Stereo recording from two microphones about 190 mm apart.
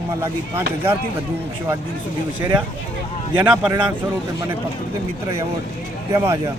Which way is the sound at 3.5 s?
5° right (ahead or behind).